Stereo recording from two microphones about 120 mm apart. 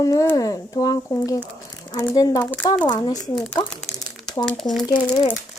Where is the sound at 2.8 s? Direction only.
35° left (ahead or behind).